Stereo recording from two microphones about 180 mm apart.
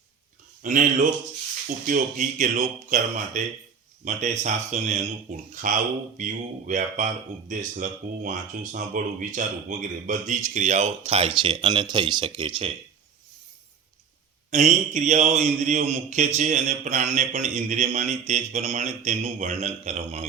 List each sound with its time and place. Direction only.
0.6 s a man's voice: 45° right (ahead or behind); by 12.7 s 30° right (ahead or behind)
14.5 s a man's voice: 40° right (ahead or behind)